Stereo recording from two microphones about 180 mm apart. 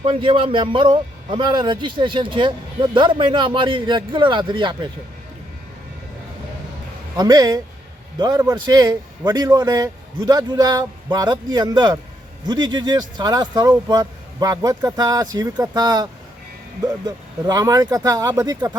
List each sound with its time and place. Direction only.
0.0 s a man's voice: 30° right (ahead or behind)
7.2 s a man's voice: 20° right (ahead or behind)
17.4 s a man's voice: 20° right (ahead or behind)